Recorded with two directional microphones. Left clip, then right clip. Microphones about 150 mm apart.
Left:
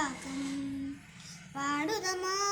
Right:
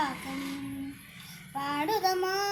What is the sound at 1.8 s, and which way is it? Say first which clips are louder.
Child singing: right 6 dB; 25° right (ahead or behind).